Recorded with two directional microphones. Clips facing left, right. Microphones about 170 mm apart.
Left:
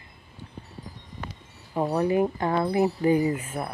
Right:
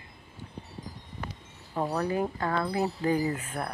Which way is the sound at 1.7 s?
15° left (ahead or behind).